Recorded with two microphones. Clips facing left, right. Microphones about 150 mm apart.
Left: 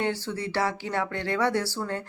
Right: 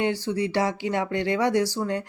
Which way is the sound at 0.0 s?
15° right (ahead or behind).